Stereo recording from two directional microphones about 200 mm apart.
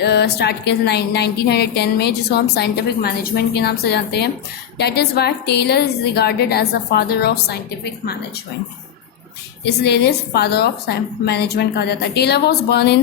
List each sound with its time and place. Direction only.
0.0 s a woman's voice: 55° left (ahead or behind)
9.6 s a woman's voice: 55° left (ahead or behind)